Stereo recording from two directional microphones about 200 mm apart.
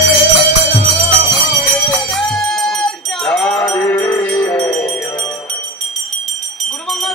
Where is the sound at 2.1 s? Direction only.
Centre (ahead or behind).